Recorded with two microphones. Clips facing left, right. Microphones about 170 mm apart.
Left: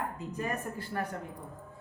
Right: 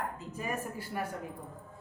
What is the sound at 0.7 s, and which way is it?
Speech, 10° right (ahead or behind).